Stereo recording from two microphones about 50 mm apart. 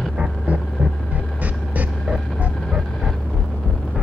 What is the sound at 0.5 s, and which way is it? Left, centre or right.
Vehicle, right.